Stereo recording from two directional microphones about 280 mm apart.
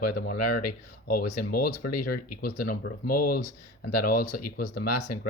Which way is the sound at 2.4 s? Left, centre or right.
Left.